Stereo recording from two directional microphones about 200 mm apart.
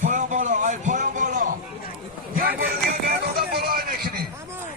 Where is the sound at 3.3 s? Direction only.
50° right (ahead or behind).